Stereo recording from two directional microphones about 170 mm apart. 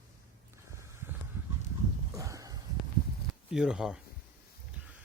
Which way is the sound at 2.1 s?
20° right (ahead or behind).